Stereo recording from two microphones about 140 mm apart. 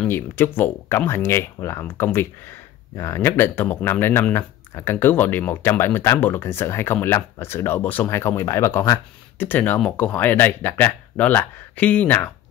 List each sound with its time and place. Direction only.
0.0 s speech: 15° left (ahead or behind)